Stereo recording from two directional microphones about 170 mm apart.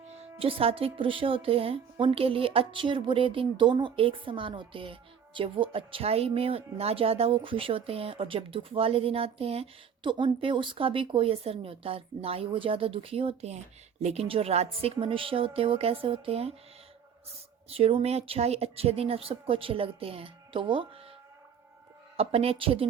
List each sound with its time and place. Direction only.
0.1 s speech: 35° right (ahead or behind)
17.7 s speech: 35° right (ahead or behind)
22.2 s speech: 35° right (ahead or behind)